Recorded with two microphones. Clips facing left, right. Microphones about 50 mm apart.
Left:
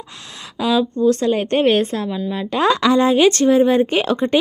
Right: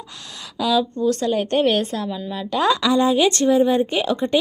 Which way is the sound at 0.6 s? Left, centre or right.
Left.